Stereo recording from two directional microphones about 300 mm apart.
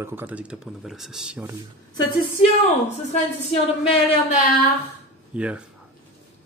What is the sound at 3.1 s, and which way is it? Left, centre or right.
A woman's voice, left.